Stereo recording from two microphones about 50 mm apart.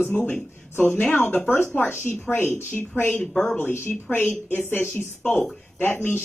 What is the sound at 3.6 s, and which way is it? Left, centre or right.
A woman's voice, left.